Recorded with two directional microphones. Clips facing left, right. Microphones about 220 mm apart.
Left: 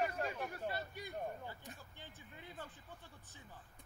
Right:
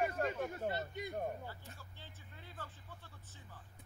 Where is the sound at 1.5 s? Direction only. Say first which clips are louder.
Left 1 dB; 15° left (ahead or behind).